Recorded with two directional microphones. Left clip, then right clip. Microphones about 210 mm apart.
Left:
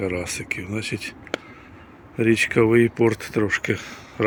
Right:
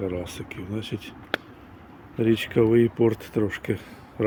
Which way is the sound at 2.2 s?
5° right (ahead or behind).